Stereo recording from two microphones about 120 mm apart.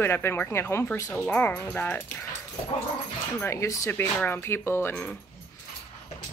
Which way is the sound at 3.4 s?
25° left (ahead or behind).